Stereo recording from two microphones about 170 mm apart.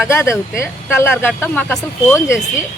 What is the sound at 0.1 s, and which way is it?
Speech, 15° left (ahead or behind).